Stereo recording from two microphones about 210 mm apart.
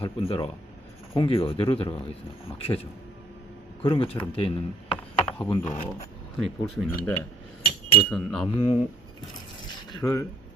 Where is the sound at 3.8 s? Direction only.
25° left (ahead or behind).